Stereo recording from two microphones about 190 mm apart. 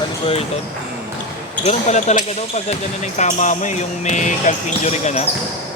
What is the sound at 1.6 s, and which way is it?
Speech, 35° left (ahead or behind).